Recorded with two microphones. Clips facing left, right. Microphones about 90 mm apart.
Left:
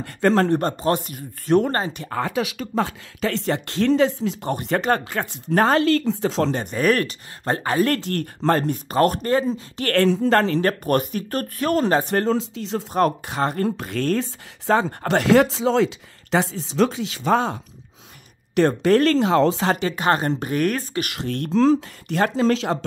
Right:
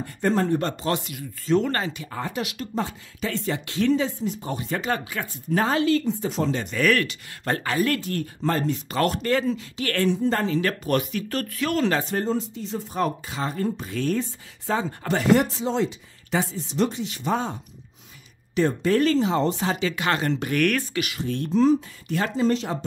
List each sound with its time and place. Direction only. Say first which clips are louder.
0.0 s speech: left 5 dB; 80° left
0.6 s speech: left 4 dB; 40° left (ahead or behind)
2.0 s speech: left 6 dB; 65° left (ahead or behind); by 4.5 s 80° left
4.5 s speech: left 7 dB; 55° left (ahead or behind); by 6.5 s 90° left
6.5 s speech: left 2 dB; 40° left (ahead or behind)
8.0 s speech: left 3 dB; 65° left (ahead or behind)
8.9 s speech: left 5 dB; 40° left (ahead or behind)
9.8 s speech: left 9 dB; 55° left (ahead or behind)
10.3 s speech: left 6 dB; 70° left (ahead or behind)
10.6 s speech: left 4 dB; 45° left (ahead or behind)
12.1 s speech: left 4 dB; 80° left
18.5 s speech: left 5 dB; 70° left (ahead or behind)
19.9 s speech: left 4 dB; 40° left (ahead or behind)
21.0 s speech: left 1 dB; 65° left (ahead or behind); by 22.8 s 90° left